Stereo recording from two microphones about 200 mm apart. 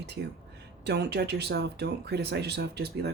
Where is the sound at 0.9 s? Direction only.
55° right (ahead or behind).